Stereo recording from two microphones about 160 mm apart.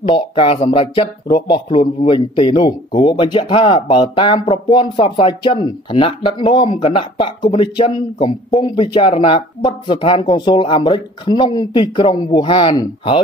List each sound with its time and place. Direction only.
0.0 s a man's voice: 35° left (ahead or behind)